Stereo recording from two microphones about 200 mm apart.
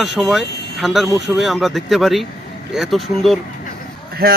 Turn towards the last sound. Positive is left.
turn(degrees=-50)  # may be behind; listen again after turning